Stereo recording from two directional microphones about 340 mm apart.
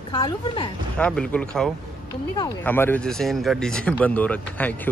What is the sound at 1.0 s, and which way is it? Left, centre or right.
Speech, centre.